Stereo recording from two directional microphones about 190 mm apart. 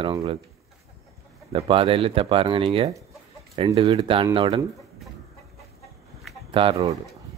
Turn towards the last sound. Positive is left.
turn(degrees=-30)  # may be behind; listen again after turning